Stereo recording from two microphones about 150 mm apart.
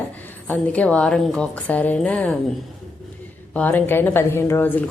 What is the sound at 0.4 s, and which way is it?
A woman's voice, 10° left (ahead or behind).